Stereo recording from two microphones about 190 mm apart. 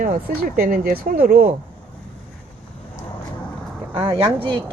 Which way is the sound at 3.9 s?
25° right (ahead or behind).